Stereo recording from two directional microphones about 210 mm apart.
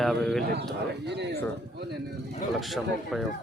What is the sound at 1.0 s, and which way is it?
Speech, 55° right (ahead or behind).